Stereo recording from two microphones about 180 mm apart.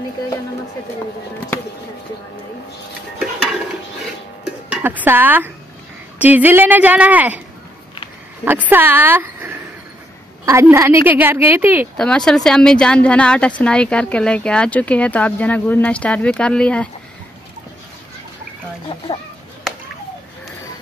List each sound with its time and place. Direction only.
3.2 s stir: centre (ahead or behind)
4.6 s a woman's voice: 10° right (ahead or behind)
8.5 s a woman's voice: 10° right (ahead or behind)
12.0 s speech: 5° left (ahead or behind)